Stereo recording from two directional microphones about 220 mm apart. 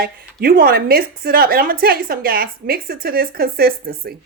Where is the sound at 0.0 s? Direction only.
40° right (ahead or behind).